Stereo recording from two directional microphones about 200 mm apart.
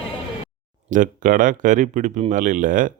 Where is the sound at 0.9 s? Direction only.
40° right (ahead or behind).